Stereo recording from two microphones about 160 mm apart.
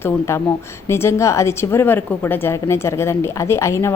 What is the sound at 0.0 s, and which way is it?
A woman's voice, 15° left (ahead or behind).